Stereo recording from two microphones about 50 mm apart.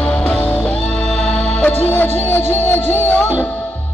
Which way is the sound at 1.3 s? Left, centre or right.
Left.